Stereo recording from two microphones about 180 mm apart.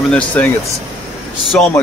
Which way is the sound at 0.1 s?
10° left (ahead or behind).